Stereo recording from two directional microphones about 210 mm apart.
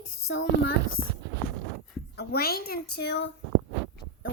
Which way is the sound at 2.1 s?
50° left (ahead or behind).